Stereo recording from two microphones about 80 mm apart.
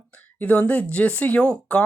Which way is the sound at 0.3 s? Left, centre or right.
Centre.